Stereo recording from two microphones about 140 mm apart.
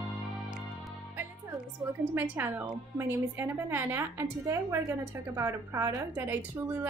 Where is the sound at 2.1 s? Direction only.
15° right (ahead or behind).